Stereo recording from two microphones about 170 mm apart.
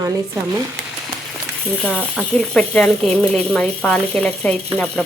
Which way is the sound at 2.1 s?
5° left (ahead or behind).